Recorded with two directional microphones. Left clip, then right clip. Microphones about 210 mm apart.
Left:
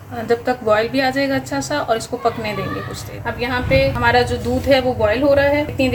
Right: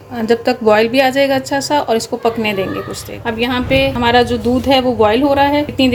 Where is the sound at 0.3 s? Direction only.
40° right (ahead or behind).